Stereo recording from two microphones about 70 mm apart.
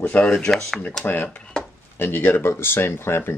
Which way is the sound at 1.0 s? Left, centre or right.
Left.